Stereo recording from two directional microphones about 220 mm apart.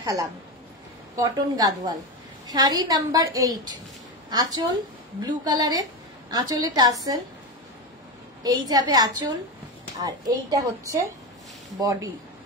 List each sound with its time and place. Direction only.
0.0 s a woman's voice: 15° right (ahead or behind)
8.4 s a woman's voice: 20° right (ahead or behind)